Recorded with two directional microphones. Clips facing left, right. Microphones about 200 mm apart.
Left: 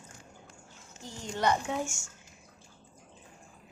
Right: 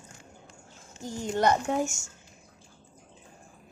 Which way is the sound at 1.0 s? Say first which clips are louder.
Right 5 dB; 45° right (ahead or behind).